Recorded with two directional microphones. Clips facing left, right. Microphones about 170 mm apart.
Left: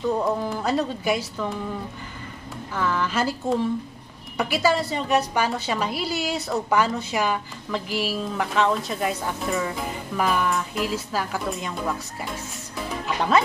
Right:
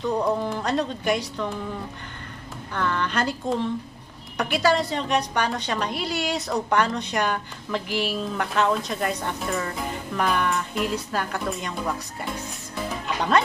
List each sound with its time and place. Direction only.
0.2 s a woman's voice: centre (ahead or behind)
2.7 s a woman's voice: 5° left (ahead or behind)